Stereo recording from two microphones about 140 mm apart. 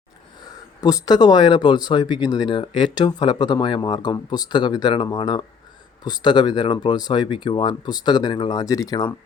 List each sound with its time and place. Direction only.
0.8 s speech: 25° left (ahead or behind)